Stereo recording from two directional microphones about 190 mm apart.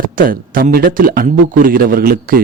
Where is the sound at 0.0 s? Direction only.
45° right (ahead or behind).